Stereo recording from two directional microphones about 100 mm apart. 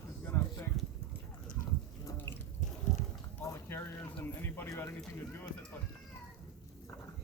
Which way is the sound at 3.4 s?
25° left (ahead or behind).